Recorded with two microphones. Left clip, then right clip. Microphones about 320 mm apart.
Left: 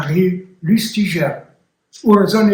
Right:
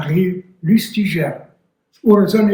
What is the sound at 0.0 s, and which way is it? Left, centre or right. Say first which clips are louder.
Speech: left 2 dB; centre.